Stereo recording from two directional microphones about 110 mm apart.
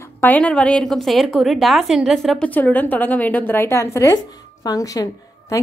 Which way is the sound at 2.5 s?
15° left (ahead or behind).